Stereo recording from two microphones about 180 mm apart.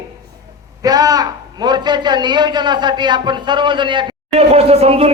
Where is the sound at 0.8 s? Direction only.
20° right (ahead or behind).